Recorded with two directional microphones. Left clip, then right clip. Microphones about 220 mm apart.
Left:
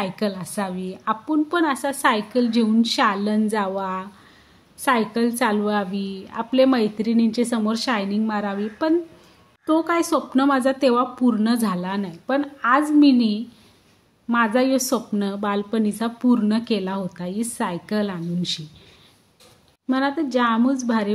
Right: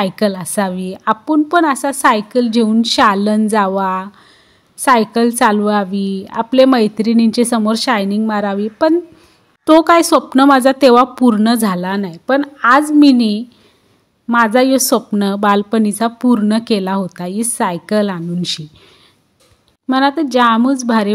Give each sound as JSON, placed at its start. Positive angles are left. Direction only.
{"t": 0.0, "sound": "a woman's voice", "side_deg": -35}
{"t": 9.7, "sound": "a woman's voice", "side_deg": -45}
{"t": 19.9, "sound": "a woman's voice", "side_deg": -40}